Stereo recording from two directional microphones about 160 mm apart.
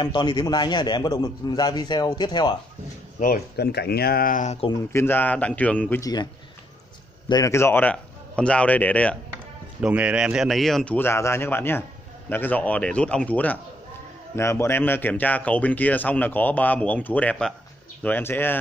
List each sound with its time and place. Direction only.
0.0 s a man's voice: 30° left (ahead or behind)
3.2 s speech: 70° left (ahead or behind); by 4.6 s 55° left (ahead or behind)
4.9 s speech: 15° left (ahead or behind)
7.2 s speech: 20° left (ahead or behind)
9.8 s speech: 5° right (ahead or behind)
11.0 s speech: 15° left (ahead or behind)